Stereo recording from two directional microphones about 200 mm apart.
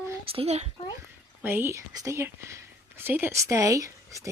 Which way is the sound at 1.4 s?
10° right (ahead or behind).